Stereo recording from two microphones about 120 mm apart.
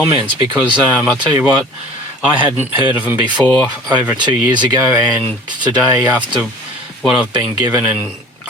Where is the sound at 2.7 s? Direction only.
15° right (ahead or behind).